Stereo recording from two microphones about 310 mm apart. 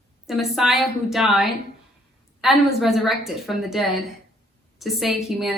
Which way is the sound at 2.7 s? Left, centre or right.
Centre.